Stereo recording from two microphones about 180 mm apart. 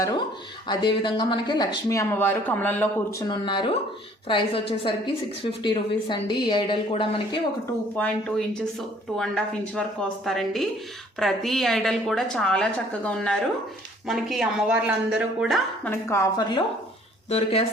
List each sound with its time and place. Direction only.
0.7 s speech: 25° left (ahead or behind)
7.9 s a woman's voice: 5° left (ahead or behind)
15.9 s speech: 15° left (ahead or behind)
17.2 s speech: 35° left (ahead or behind)